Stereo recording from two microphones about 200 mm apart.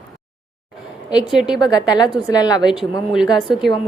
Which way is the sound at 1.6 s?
20° left (ahead or behind).